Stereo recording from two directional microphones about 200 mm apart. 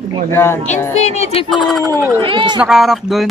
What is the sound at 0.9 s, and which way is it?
Speech, 35° left (ahead or behind).